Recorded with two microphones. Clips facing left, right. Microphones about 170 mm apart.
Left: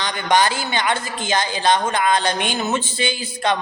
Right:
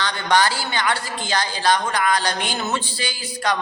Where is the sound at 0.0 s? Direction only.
20° left (ahead or behind).